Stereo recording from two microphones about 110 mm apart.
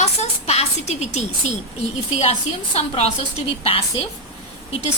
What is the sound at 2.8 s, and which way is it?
Speech, 65° left (ahead or behind).